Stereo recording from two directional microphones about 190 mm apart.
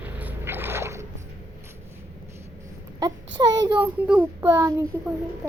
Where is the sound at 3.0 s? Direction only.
20° right (ahead or behind).